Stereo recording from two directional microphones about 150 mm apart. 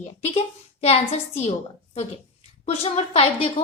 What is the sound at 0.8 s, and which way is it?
Speech, 45° left (ahead or behind).